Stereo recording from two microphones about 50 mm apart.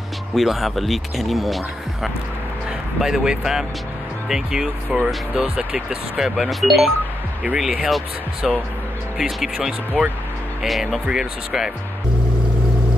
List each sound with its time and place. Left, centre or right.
0.3 s speech: centre
3.0 s speech: centre
8.4 s speech: centre